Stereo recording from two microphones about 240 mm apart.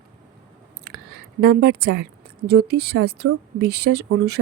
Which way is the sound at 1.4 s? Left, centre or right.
Right.